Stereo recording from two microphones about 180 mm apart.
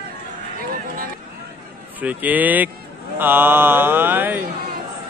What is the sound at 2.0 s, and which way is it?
Mantra, 10° right (ahead or behind).